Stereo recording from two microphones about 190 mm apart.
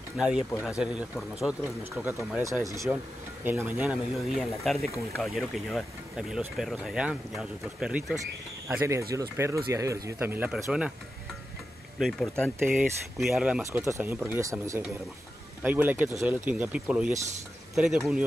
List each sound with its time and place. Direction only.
0.2 s speech: 5° right (ahead or behind)
8.6 s speech: 15° right (ahead or behind)
12.0 s speech: centre (ahead or behind)